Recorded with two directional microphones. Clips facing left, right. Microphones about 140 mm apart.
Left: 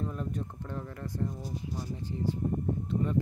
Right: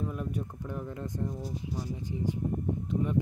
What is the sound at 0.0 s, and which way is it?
Speech, 10° right (ahead or behind).